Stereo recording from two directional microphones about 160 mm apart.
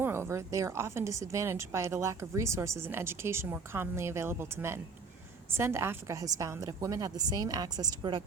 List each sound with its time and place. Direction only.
0.0 s a woman's voice: 15° right (ahead or behind)